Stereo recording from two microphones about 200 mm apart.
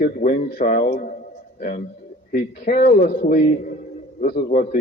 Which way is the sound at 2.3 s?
50° left (ahead or behind).